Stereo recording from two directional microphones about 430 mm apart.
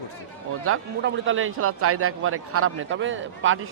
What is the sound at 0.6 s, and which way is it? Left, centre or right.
A man's voice, right.